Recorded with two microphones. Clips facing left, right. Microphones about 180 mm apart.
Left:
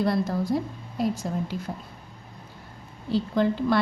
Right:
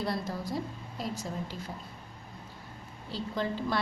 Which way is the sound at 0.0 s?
60° left (ahead or behind).